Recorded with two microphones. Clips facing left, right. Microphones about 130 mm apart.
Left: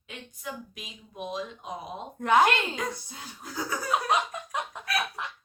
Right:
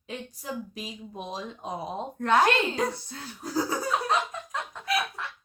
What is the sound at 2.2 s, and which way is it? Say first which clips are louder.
Speech: left 1 dB; 15° left (ahead or behind).